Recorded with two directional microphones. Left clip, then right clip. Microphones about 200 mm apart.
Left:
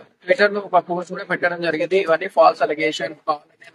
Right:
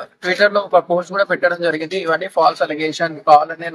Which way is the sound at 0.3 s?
5° right (ahead or behind).